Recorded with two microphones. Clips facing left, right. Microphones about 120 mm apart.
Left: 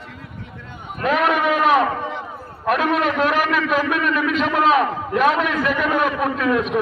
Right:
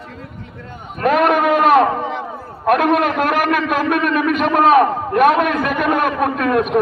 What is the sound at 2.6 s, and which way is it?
A man's voice, 55° right (ahead or behind).